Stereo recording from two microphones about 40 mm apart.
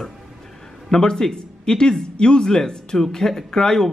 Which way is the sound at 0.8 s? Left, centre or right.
Centre.